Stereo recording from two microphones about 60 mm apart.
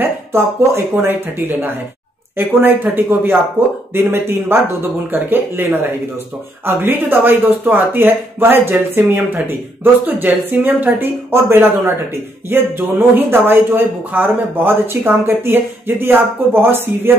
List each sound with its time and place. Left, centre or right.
0.0 s speech: right